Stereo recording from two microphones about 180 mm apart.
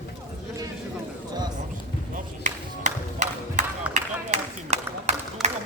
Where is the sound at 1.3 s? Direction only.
25° right (ahead or behind).